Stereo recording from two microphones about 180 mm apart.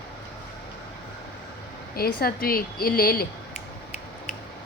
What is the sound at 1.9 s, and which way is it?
A woman's voice, 55° left (ahead or behind).